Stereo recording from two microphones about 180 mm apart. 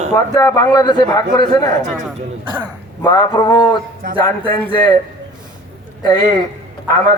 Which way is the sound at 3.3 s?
15° left (ahead or behind).